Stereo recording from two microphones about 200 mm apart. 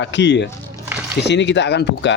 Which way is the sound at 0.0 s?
65° left (ahead or behind).